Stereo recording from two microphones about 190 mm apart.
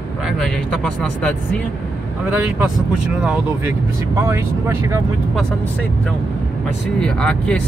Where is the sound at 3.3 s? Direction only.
10° right (ahead or behind).